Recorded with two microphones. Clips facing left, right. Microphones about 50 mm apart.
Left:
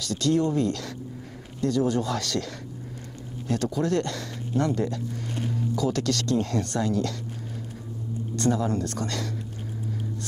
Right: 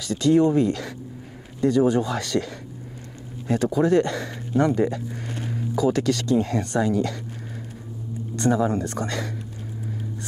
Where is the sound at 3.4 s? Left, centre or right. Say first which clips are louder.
Right 5 dB; centre.